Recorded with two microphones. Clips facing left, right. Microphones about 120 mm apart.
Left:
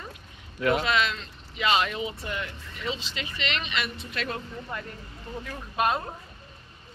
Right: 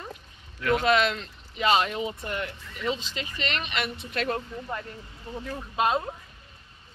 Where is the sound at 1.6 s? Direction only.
40° right (ahead or behind).